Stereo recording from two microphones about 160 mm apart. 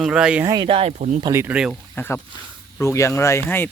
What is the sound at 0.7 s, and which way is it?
Speech, 40° right (ahead or behind).